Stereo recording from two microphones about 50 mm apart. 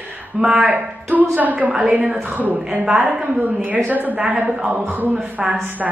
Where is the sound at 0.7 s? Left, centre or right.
Right.